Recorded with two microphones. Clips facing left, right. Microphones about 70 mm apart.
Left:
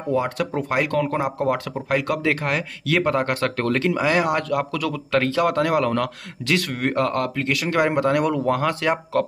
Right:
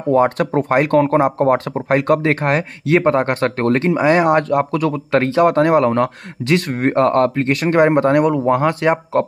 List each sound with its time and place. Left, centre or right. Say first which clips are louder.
0.1 s speech: right 8 dB; right